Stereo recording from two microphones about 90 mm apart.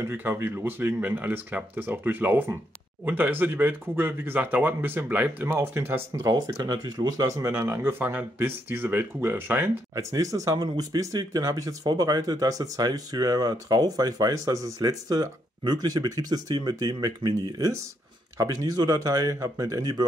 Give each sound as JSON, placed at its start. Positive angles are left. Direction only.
{"t": 0.0, "sound": "speech", "side_deg": -25}
{"t": 6.3, "sound": "speech", "side_deg": -45}
{"t": 7.4, "sound": "speech", "side_deg": -30}
{"t": 9.9, "sound": "speech", "side_deg": -40}